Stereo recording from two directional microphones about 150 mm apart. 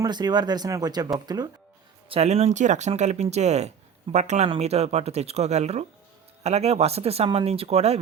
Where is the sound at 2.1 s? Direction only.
45° right (ahead or behind).